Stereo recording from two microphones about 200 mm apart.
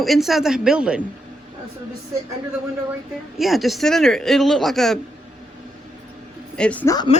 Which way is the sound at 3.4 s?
Centre (ahead or behind).